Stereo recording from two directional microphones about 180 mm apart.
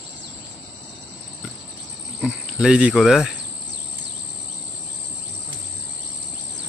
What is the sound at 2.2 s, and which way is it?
Speech, 5° right (ahead or behind).